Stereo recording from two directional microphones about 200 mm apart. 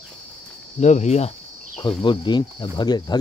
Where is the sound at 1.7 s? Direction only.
20° left (ahead or behind).